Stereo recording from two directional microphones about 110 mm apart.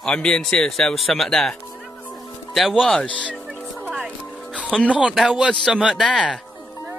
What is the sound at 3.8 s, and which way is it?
Music, 10° right (ahead or behind).